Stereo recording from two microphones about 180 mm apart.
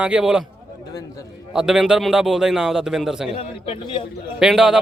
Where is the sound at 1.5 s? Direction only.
5° right (ahead or behind).